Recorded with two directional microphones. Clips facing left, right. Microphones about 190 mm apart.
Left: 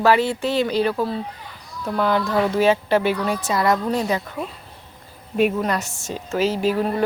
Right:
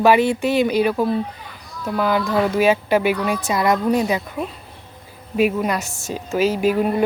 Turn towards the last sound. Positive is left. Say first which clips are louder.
# right 2 dB
turn(degrees=-15)  # may be behind; listen again after turning